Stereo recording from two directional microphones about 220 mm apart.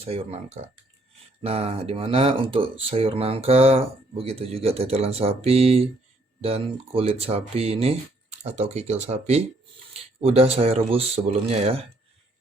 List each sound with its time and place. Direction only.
0.0 s speech: 25° right (ahead or behind)